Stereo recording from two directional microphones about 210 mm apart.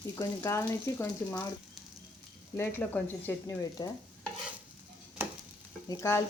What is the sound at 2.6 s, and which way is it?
Speech, 10° left (ahead or behind).